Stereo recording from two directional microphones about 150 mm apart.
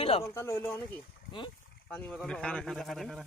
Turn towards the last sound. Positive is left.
turn(degrees=0)  # may be behind; listen again after turning